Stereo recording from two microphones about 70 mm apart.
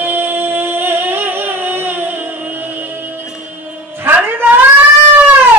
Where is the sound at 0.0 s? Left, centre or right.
Right.